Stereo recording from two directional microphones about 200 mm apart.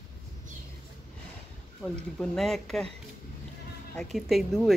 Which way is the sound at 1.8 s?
5° left (ahead or behind).